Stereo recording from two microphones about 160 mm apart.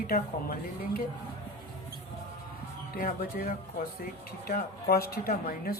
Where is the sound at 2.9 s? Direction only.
60° left (ahead or behind).